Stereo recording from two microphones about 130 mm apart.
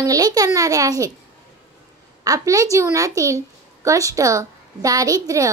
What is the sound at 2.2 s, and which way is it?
A woman's voice, 25° right (ahead or behind).